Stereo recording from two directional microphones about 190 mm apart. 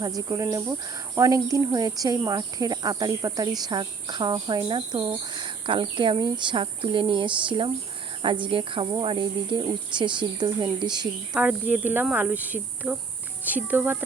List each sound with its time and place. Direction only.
0.3 s speech: 15° right (ahead or behind)
11.3 s cricket: 10° right (ahead or behind)